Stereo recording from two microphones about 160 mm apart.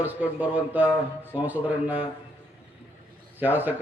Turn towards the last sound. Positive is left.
turn(degrees=-10)  # may be behind; listen again after turning